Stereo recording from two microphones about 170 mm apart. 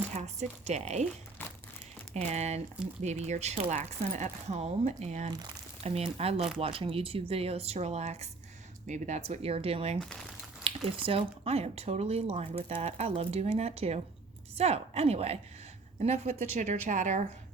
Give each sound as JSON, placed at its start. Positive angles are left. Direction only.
{"t": 0.1, "sound": "speech", "side_deg": -40}
{"t": 2.2, "sound": "speech", "side_deg": -40}
{"t": 5.3, "sound": "speech", "side_deg": -25}
{"t": 5.8, "sound": "a woman's voice", "side_deg": -35}